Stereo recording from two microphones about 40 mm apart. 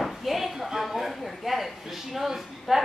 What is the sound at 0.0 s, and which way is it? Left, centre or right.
Speech, centre.